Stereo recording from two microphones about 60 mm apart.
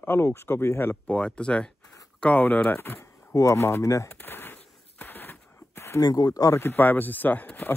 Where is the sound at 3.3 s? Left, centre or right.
Left.